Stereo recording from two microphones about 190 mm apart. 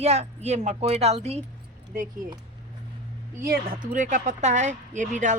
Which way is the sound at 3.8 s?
45° right (ahead or behind).